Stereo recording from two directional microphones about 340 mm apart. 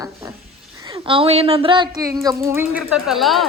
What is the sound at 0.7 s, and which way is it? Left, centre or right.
Speech, centre.